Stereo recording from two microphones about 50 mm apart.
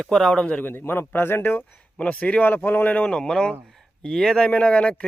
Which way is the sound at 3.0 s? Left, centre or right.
Centre.